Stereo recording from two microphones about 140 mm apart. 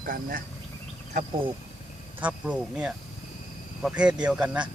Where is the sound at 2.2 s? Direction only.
10° right (ahead or behind).